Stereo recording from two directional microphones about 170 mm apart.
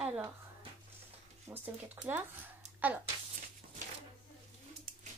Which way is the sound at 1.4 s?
10° right (ahead or behind).